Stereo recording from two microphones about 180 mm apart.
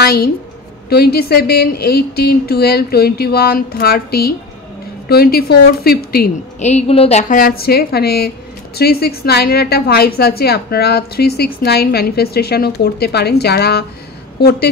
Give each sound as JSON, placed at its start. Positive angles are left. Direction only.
{"t": 0.0, "sound": "a woman's voice", "side_deg": 60}
{"t": 6.6, "sound": "a woman's voice", "side_deg": 35}